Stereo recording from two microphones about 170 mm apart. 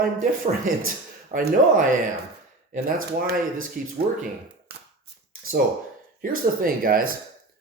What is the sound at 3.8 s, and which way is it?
Speech, 55° right (ahead or behind).